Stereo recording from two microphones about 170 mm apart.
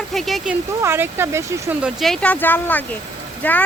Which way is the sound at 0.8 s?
15° right (ahead or behind).